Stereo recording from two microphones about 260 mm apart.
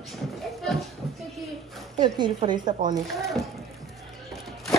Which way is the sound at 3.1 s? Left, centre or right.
Centre.